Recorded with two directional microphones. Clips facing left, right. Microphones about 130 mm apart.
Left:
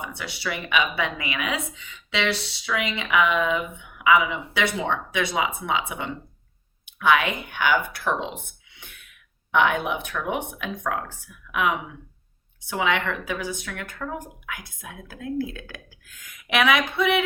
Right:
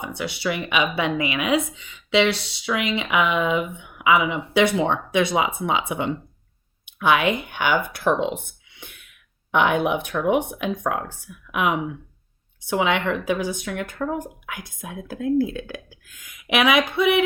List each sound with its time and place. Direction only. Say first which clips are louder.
0.1 s speech: right 5 dB; 20° right (ahead or behind)
9.5 s speech: right 2 dB; 20° right (ahead or behind)
12.7 s speech: right 3 dB; 20° right (ahead or behind)
16.4 s a sound: right 2 dB; 15° right (ahead or behind)